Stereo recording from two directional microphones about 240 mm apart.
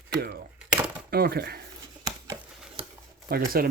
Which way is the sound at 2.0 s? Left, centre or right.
Centre.